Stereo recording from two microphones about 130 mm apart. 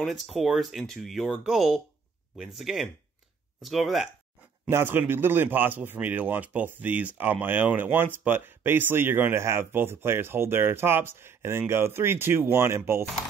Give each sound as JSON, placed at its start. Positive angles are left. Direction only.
{"t": 0.0, "sound": "speech", "side_deg": 0}
{"t": 4.6, "sound": "a man's voice", "side_deg": -15}